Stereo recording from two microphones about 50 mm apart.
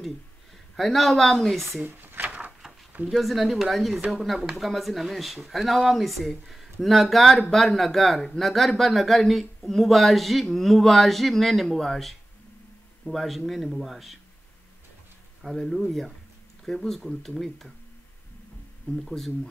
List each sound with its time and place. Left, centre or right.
0.7 s speech: centre
1.9 s a sound: right
2.2 s a sound: right
3.1 s speech: centre
15.4 s speech: centre
19.0 s speech: centre